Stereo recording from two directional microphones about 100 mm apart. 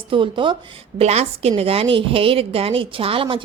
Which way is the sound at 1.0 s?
90° right.